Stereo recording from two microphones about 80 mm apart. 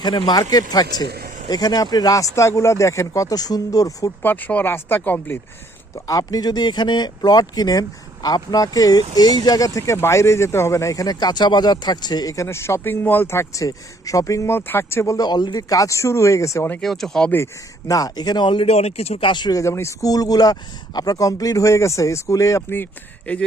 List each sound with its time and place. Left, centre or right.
0.0 s speech: left
4.2 s speech: left
6.1 s speech: left
14.5 s speech: left
15.3 s speech: left
16.8 s speech: centre
17.8 s speech: left
19.5 s speech: left
22.7 s speech: left